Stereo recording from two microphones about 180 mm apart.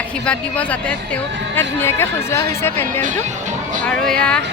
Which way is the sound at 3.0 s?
45° right (ahead or behind).